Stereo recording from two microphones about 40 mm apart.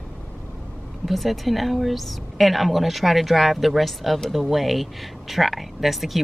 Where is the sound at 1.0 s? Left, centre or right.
Centre.